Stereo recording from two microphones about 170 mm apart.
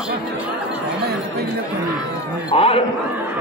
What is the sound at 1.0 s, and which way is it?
Speech, 70° right (ahead or behind).